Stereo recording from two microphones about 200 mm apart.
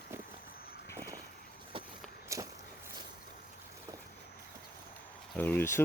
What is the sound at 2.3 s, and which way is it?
Walk, 15° right (ahead or behind).